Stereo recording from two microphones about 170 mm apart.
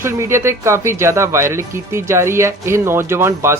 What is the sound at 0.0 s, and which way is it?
Speech, 15° right (ahead or behind).